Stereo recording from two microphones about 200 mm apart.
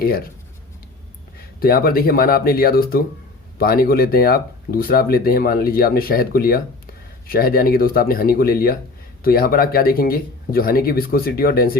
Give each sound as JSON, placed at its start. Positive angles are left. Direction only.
{"t": 1.5, "sound": "speech", "side_deg": 50}